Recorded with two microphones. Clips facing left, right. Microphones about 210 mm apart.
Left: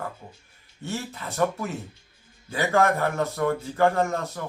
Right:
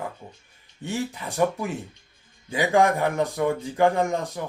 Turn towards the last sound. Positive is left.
turn(degrees=-15)  # may be behind; listen again after turning